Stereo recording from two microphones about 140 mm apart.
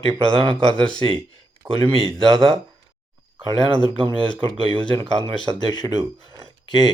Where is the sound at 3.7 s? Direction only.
35° left (ahead or behind).